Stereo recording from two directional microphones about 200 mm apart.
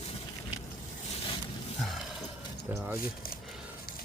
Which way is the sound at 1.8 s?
Centre (ahead or behind).